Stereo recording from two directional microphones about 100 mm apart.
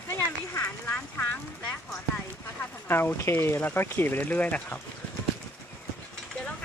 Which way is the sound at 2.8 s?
20° left (ahead or behind).